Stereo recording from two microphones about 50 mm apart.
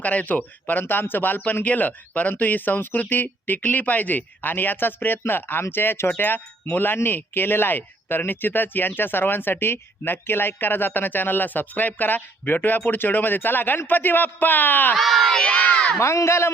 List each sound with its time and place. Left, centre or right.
0.0 s speech: left
14.9 s speech: centre
15.5 s speech: left
16.0 s speech: left